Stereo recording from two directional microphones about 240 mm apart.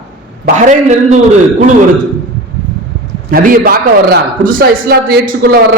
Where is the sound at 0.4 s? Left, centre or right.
Right.